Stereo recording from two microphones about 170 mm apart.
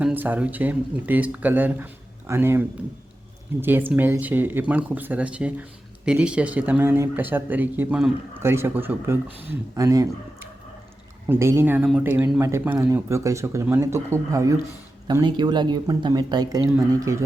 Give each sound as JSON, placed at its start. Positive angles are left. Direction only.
{"t": 0.0, "sound": "a man's voice", "side_deg": -10}